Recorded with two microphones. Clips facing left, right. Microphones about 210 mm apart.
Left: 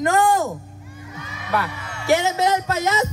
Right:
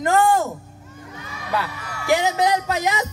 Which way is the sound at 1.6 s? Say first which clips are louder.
Left 1 dB; 25° left (ahead or behind).